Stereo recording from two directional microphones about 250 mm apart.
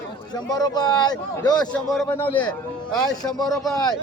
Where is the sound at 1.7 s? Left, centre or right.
Centre.